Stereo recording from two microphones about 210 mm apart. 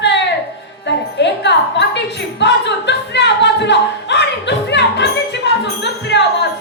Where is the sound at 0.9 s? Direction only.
55° left (ahead or behind).